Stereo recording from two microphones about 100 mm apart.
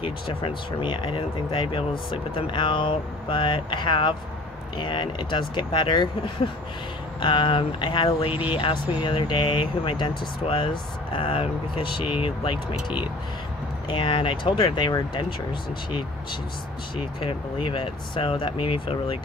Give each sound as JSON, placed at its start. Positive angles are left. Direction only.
{"t": 0.0, "sound": "speech", "side_deg": 65}
{"t": 13.8, "sound": "speech", "side_deg": 60}
{"t": 17.2, "sound": "speech", "side_deg": 60}